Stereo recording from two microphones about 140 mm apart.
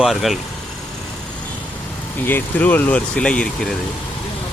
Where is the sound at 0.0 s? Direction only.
Centre (ahead or behind).